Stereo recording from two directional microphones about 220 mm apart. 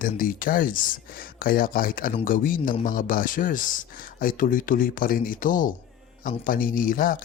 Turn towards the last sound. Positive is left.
turn(degrees=40)  # may be behind; listen again after turning